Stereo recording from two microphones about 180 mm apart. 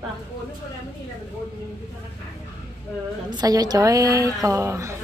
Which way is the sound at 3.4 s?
20° right (ahead or behind).